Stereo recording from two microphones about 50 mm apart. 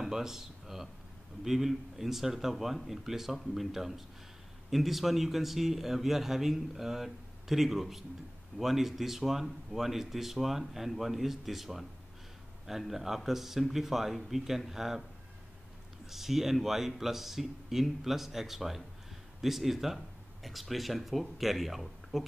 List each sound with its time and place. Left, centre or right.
0.0 s a sound: centre
1.4 s a man's voice: centre
16.1 s a man's voice: centre